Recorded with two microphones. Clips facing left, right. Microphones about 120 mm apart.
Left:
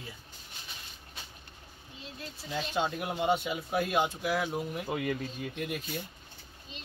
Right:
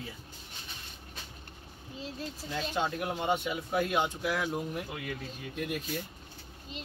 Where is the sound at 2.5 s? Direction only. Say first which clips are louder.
Left 1 dB; 15° left (ahead or behind).